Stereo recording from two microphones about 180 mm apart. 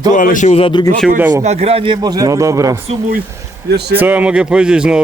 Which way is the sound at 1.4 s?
40° right (ahead or behind).